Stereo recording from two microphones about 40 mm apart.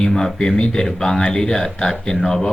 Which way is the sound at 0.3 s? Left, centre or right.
Centre.